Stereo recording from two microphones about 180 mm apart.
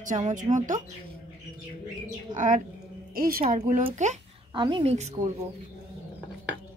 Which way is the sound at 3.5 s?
40° right (ahead or behind).